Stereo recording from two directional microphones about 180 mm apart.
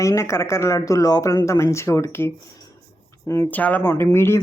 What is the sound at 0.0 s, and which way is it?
Speech, 15° left (ahead or behind).